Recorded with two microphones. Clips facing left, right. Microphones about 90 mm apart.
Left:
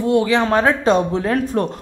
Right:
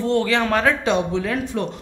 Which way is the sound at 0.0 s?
15° left (ahead or behind).